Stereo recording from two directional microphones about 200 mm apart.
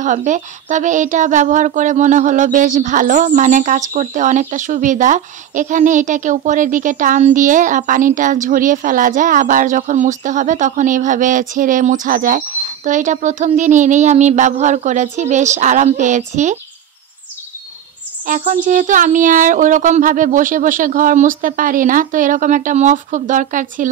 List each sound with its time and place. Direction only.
0.0 s speech: 40° right (ahead or behind)
18.2 s speech: 40° right (ahead or behind)